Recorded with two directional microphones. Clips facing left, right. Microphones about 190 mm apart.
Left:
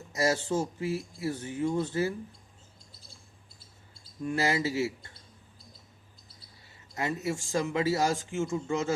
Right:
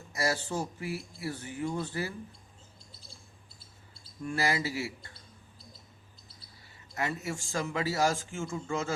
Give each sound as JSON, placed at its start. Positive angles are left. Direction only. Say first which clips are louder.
{"t": 0.1, "sound": "speech", "louder": "left 4 dB", "side_deg": 20}
{"t": 4.2, "sound": "speech", "louder": "left 3 dB", "side_deg": 20}
{"t": 6.9, "sound": "speech", "louder": "left 3 dB", "side_deg": 20}